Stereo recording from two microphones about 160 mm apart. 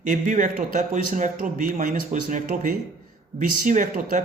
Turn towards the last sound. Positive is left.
turn(degrees=-55)  # may be behind; listen again after turning